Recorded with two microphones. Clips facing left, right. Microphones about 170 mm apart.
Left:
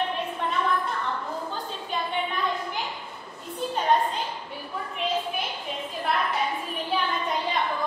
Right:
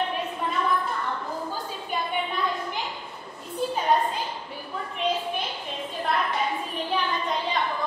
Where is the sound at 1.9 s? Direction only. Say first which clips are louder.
Right 1 dB; 10° right (ahead or behind).